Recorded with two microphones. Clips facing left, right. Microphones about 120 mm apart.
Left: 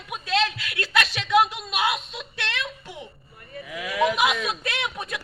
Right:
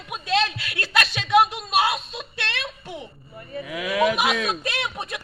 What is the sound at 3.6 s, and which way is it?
Speech, 90° right.